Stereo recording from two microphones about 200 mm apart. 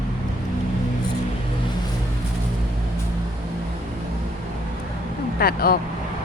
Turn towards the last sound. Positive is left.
turn(degrees=50)  # may be behind; listen again after turning